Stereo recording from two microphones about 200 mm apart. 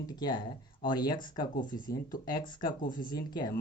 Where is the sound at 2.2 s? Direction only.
20° left (ahead or behind).